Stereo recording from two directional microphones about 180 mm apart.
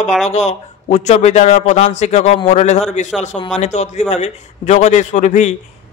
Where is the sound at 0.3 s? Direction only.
40° left (ahead or behind).